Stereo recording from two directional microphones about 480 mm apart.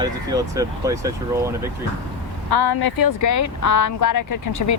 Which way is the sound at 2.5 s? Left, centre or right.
Left.